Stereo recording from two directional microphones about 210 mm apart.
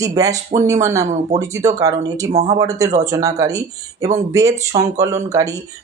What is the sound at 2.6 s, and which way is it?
Speech, 15° right (ahead or behind).